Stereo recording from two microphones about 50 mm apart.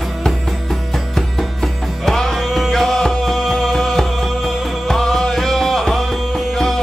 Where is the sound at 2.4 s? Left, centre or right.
Centre.